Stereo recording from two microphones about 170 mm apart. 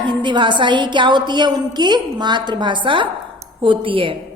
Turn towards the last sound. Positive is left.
turn(degrees=-30)  # may be behind; listen again after turning